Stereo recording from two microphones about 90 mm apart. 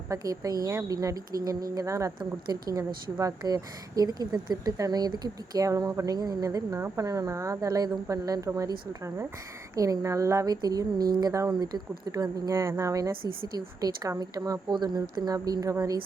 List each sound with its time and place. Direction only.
0.1 s a woman's voice: 40° right (ahead or behind)